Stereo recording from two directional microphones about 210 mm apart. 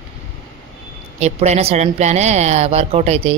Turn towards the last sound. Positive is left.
turn(degrees=-30)  # may be behind; listen again after turning